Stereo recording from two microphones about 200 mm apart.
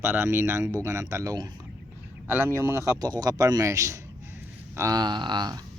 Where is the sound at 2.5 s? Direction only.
15° right (ahead or behind).